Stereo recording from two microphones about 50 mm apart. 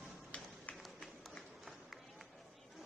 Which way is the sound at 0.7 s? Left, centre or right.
Left.